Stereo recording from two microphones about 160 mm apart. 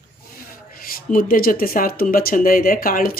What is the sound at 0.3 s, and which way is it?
Speech, 65° left (ahead or behind).